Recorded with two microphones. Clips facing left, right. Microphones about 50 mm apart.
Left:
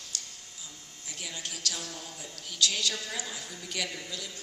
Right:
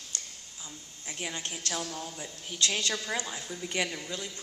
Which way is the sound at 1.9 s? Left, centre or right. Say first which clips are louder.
Right 4 dB; right.